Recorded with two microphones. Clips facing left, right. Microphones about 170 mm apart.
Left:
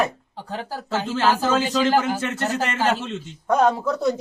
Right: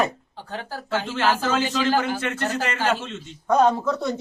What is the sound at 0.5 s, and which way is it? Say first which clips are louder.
A man's voice: left 1 dB; 35° left (ahead or behind).